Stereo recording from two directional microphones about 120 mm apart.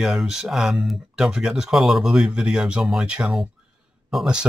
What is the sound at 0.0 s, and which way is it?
Speech, 5° right (ahead or behind).